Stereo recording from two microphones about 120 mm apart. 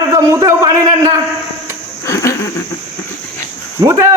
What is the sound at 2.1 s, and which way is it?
Cricket, 25° left (ahead or behind).